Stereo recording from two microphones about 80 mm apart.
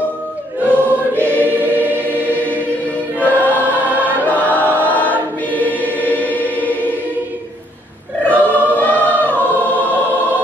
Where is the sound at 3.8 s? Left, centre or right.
Right.